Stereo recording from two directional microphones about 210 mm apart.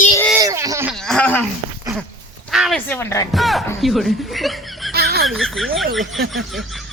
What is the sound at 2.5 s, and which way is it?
Speech, centre (ahead or behind).